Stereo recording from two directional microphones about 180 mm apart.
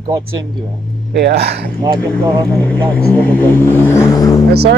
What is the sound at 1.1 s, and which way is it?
Speech, 60° right (ahead or behind).